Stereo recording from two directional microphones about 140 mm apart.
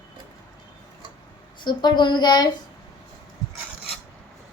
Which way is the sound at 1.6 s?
30° left (ahead or behind).